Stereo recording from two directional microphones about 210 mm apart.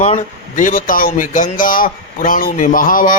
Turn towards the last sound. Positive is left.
turn(degrees=40)  # may be behind; listen again after turning